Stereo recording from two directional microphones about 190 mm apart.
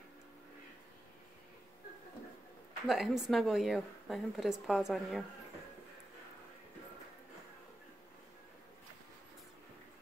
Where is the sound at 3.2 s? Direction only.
Centre (ahead or behind).